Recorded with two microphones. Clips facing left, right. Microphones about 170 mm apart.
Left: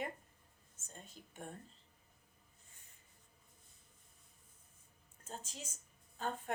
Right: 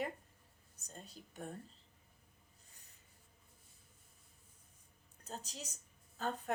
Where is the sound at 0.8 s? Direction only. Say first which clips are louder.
Right 2 dB; 40° right (ahead or behind).